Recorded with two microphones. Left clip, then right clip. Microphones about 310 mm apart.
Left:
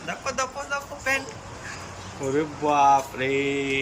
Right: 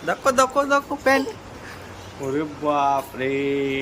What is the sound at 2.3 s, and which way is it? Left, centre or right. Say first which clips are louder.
Speech: even; centre.